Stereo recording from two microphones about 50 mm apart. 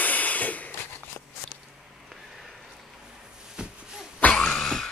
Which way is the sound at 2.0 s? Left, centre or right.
Centre.